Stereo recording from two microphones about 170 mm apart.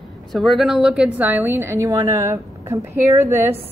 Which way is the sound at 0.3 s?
Centre (ahead or behind).